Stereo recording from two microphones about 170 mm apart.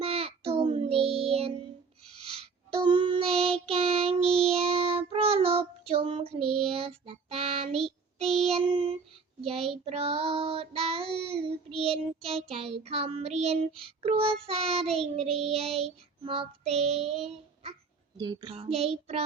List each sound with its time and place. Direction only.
0.0 s child singing: 35° right (ahead or behind)
8.3 s child singing: centre (ahead or behind)
9.5 s child singing: 35° right (ahead or behind)
18.2 s child singing: 25° right (ahead or behind)